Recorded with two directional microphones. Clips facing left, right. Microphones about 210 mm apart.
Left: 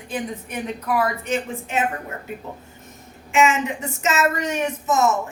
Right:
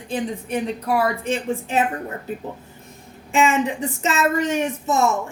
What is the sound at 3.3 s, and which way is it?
A woman's voice, 35° right (ahead or behind).